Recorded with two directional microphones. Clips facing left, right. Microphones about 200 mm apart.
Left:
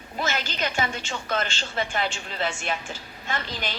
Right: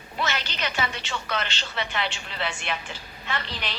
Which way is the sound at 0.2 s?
45° left (ahead or behind).